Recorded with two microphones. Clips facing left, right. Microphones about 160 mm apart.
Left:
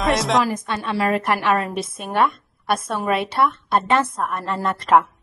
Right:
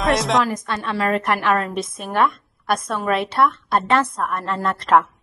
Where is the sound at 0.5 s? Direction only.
25° left (ahead or behind).